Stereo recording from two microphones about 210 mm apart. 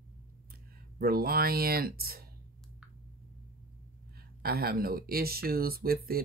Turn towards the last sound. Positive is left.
turn(degrees=-45)  # may be behind; listen again after turning